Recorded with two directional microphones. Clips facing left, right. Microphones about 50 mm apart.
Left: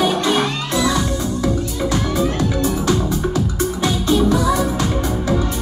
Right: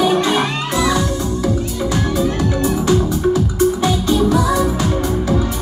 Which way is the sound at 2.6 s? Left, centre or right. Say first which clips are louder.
Right 4 dB; centre.